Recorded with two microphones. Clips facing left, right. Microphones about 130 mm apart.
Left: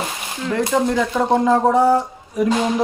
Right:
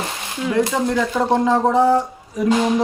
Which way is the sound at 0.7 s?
Centre (ahead or behind).